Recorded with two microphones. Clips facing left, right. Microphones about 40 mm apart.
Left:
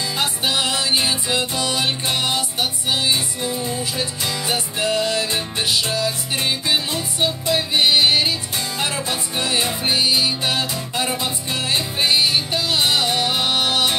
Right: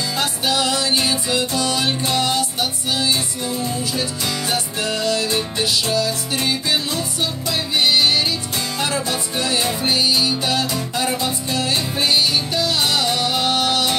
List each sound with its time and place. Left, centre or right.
0.2 s music: left